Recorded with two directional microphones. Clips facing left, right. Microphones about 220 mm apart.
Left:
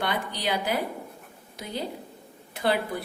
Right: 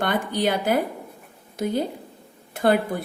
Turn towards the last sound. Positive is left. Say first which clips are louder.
# right 6 dB
turn(degrees=-50)  # may be behind; listen again after turning